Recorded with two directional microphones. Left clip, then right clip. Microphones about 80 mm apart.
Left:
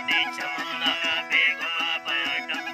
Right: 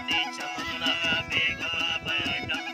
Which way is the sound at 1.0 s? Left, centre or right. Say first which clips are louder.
Left 5 dB; left.